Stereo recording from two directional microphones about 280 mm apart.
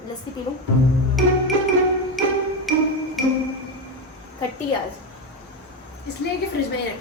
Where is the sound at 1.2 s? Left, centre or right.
Centre.